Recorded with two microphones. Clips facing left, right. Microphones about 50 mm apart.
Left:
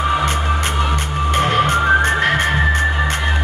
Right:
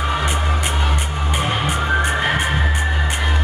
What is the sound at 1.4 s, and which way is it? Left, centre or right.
Music, left.